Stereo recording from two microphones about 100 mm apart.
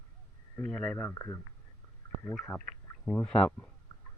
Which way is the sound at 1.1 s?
30° left (ahead or behind).